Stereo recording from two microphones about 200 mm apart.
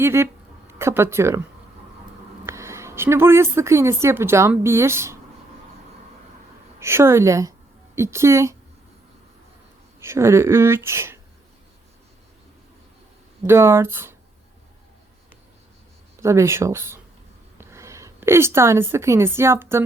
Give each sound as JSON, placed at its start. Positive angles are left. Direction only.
{"t": 0.0, "sound": "speech", "side_deg": -10}
{"t": 2.5, "sound": "a woman's voice", "side_deg": -15}
{"t": 6.7, "sound": "speech", "side_deg": -15}
{"t": 10.0, "sound": "speech", "side_deg": -15}
{"t": 13.4, "sound": "speech", "side_deg": -15}
{"t": 16.2, "sound": "a woman's voice", "side_deg": -15}